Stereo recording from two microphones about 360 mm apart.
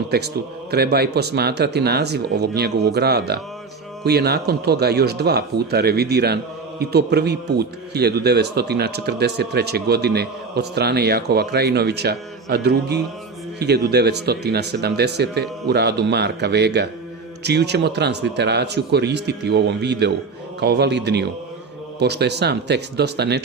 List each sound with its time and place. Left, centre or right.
0.1 s speech: right